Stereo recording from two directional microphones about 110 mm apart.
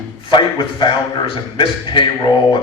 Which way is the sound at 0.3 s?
45° left (ahead or behind).